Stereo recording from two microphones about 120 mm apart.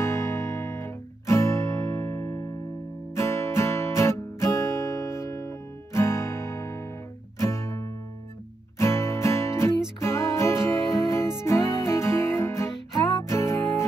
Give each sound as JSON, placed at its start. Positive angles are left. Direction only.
{"t": 0.0, "sound": "guitar", "side_deg": 25}
{"t": 3.2, "sound": "music", "side_deg": 20}